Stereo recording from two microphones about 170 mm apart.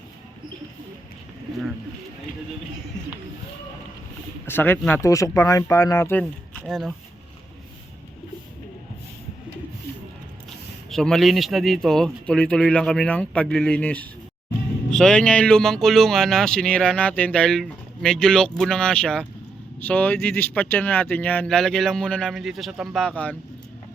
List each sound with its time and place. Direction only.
4.4 s speech: 10° left (ahead or behind)
10.8 s speech: 5° left (ahead or behind)